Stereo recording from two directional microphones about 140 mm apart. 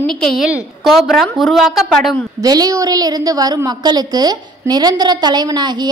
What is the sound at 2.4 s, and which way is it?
A woman's voice, 25° right (ahead or behind).